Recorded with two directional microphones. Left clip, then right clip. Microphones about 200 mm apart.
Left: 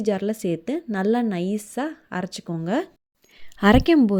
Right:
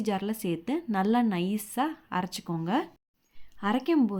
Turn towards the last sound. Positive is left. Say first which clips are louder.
# left 9 dB
turn(degrees=40)  # may be behind; listen again after turning